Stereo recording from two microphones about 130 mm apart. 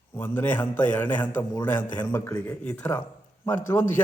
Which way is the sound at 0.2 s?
15° left (ahead or behind).